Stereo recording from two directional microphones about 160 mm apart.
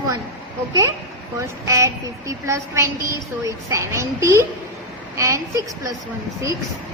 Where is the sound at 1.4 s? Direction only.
20° right (ahead or behind).